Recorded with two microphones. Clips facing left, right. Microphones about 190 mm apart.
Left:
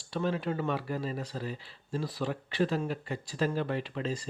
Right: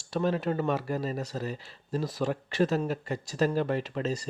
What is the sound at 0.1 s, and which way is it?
Speech, 45° right (ahead or behind).